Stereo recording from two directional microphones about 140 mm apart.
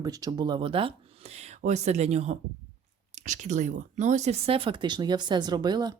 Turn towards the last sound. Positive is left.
turn(degrees=-30)  # may be behind; listen again after turning